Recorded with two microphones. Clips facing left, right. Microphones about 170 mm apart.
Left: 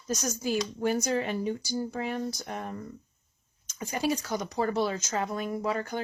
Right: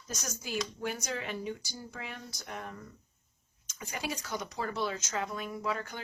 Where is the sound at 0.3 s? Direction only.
40° left (ahead or behind).